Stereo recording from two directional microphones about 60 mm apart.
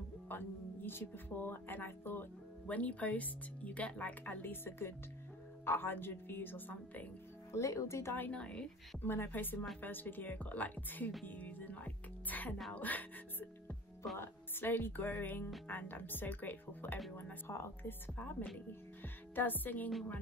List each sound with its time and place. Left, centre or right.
0.3 s speech: left
2.6 s speech: left
7.5 s speech: left
8.3 s speech: centre
9.0 s speech: left
11.2 s music: left
12.7 s speech: left
14.1 s speech: left
17.5 s speech: left